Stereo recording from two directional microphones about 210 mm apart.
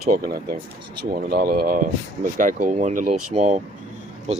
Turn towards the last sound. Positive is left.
turn(degrees=-30)  # may be behind; listen again after turning